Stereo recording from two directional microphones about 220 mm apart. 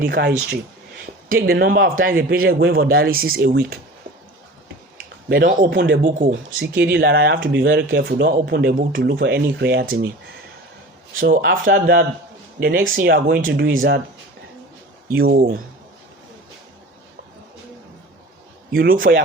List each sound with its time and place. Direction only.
0.0 s a man's voice: 45° right (ahead or behind)
5.3 s speech: 40° right (ahead or behind)
5.7 s a man's voice: 50° right (ahead or behind)
11.1 s speech: 40° right (ahead or behind)
15.1 s a man's voice: 45° right (ahead or behind)
18.7 s speech: 40° right (ahead or behind)